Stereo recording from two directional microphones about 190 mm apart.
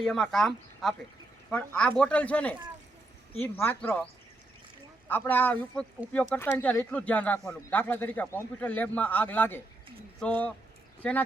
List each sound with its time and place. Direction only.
0.0 s speech: centre (ahead or behind)
5.0 s speech: 10° left (ahead or behind)